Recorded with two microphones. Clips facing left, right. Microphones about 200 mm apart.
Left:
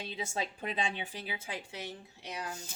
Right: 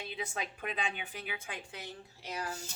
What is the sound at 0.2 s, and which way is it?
Speech, 30° left (ahead or behind).